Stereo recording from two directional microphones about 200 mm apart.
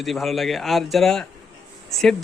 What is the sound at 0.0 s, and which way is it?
Speech, centre (ahead or behind).